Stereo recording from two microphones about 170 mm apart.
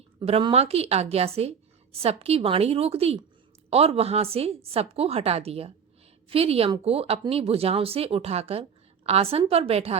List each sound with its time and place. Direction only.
0.2 s a woman's voice: 35° right (ahead or behind)